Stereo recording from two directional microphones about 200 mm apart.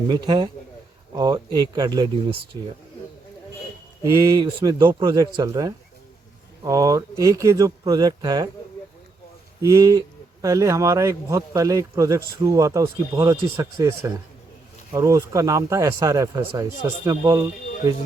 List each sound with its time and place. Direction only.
0.1 s speech: 25° right (ahead or behind)
4.0 s speech: 15° right (ahead or behind)
9.6 s speech: 15° right (ahead or behind)